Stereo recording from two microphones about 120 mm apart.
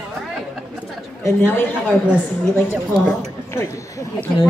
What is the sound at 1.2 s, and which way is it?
Speech, 15° left (ahead or behind).